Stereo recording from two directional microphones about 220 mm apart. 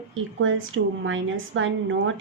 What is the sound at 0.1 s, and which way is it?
A woman's voice, 60° right (ahead or behind).